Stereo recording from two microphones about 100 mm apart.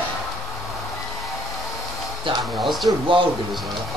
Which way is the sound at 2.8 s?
50° right (ahead or behind).